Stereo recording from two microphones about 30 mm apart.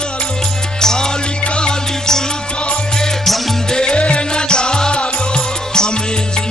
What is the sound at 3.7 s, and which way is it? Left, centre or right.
Music, left.